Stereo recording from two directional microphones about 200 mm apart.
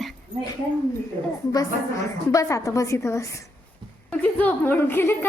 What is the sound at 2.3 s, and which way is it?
A woman's voice, 15° left (ahead or behind).